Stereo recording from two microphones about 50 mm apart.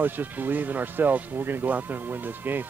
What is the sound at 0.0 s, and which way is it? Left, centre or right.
Speech, right.